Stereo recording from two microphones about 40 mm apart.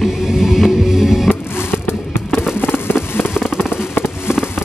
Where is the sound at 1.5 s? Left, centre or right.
Left.